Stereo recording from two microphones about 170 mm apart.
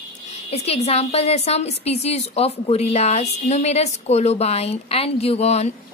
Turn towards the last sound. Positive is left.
turn(degrees=40)  # may be behind; listen again after turning